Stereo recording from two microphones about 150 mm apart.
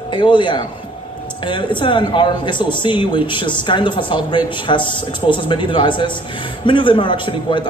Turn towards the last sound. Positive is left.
turn(degrees=30)  # may be behind; listen again after turning